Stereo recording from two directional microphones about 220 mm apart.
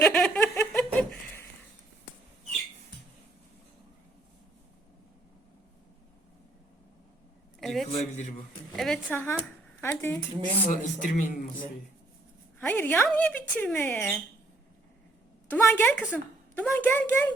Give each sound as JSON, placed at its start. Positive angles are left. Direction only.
{"t": 0.0, "sound": "a sound", "side_deg": 5}
{"t": 7.6, "sound": "a sound", "side_deg": 0}
{"t": 7.9, "sound": "a man's voice", "side_deg": 30}
{"t": 8.7, "sound": "speech", "side_deg": 0}
{"t": 10.7, "sound": "a man's voice", "side_deg": 35}
{"t": 12.5, "sound": "speech", "side_deg": 10}
{"t": 15.4, "sound": "a woman's voice", "side_deg": 10}